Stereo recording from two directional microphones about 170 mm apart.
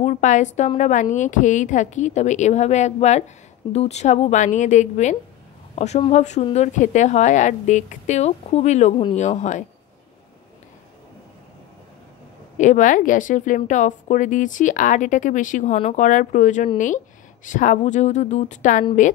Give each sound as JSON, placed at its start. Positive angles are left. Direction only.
{"t": 0.0, "sound": "a woman's voice", "side_deg": 45}
{"t": 12.5, "sound": "speech", "side_deg": 45}